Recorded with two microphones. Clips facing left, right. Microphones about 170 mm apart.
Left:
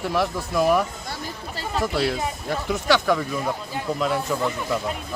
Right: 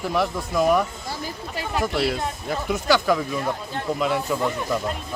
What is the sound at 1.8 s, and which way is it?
Speech, centre (ahead or behind).